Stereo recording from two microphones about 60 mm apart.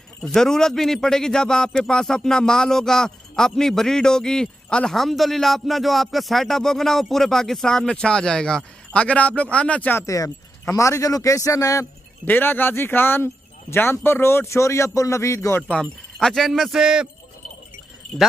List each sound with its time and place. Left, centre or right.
0.2 s a man's voice: centre
4.9 s a man's voice: centre; by 9.9 s left
10.0 s a man's voice: left
12.3 s speech: left
15.8 s speech: centre
16.8 s speech: centre